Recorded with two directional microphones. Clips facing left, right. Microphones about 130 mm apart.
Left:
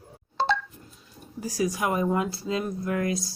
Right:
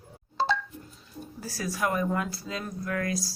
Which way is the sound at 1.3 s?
15° left (ahead or behind).